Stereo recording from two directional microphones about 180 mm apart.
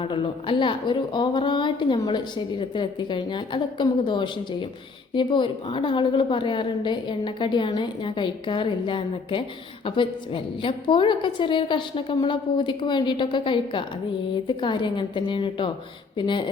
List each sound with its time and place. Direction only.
0.0 s a woman's voice: 30° left (ahead or behind)